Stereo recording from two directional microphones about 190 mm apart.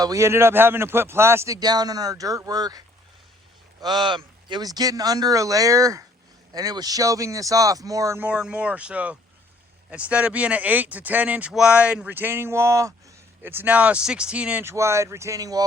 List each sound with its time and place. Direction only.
0.0 s speech: 15° right (ahead or behind)